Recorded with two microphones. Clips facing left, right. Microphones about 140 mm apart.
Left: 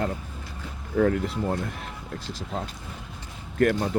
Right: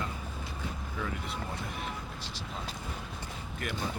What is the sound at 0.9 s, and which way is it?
Speech, 60° left (ahead or behind).